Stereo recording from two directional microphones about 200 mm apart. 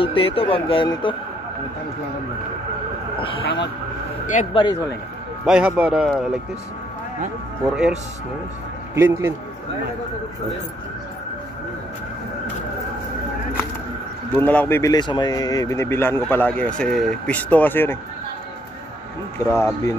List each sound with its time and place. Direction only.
0.0 s speech: 25° left (ahead or behind)
3.4 s speech: 60° left (ahead or behind)
4.3 s speech: 35° left (ahead or behind)
5.4 s a man's voice: 5° right (ahead or behind)
8.9 s a man's voice: 10° right (ahead or behind)
14.3 s speech: 10° left (ahead or behind)
19.3 s speech: 15° left (ahead or behind)